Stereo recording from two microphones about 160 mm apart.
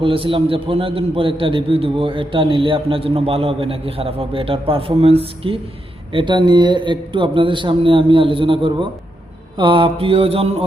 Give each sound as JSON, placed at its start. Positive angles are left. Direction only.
{"t": 0.0, "sound": "a man's voice", "side_deg": -35}